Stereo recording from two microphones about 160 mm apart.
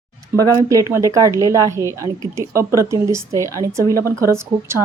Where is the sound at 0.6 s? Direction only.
20° right (ahead or behind).